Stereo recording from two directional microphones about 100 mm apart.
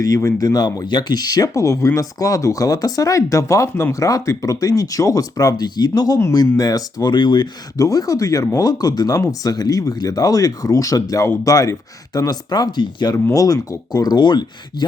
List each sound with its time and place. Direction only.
0.0 s speech: 35° left (ahead or behind); by 7.4 s 50° left (ahead or behind)
7.8 s speech: 35° left (ahead or behind)
13.3 s speech: 35° left (ahead or behind)